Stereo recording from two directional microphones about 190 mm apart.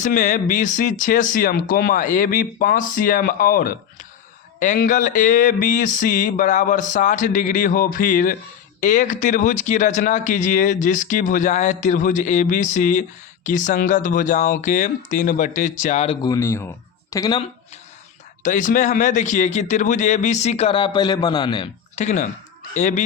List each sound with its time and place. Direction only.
0.0 s speech: 40° left (ahead or behind)
16.2 s speech: 15° left (ahead or behind)
18.4 s speech: 40° left (ahead or behind); by 21.7 s 25° left (ahead or behind)
21.9 s speech: 40° left (ahead or behind)